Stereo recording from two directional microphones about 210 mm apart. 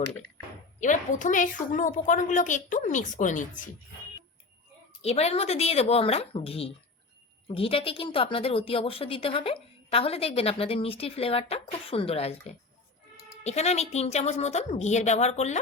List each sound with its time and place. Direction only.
0.8 s a woman's voice: 35° left (ahead or behind)
5.0 s a woman's voice: 30° left (ahead or behind)